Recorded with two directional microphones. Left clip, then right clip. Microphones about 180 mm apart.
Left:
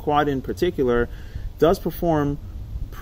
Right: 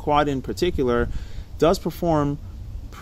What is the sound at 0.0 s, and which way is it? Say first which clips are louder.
Speech: even; 15° right (ahead or behind).